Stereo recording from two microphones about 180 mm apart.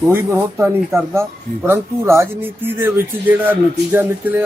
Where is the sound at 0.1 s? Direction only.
10° right (ahead or behind).